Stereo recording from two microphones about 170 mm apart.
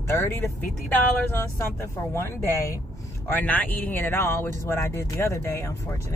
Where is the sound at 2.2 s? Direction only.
15° left (ahead or behind).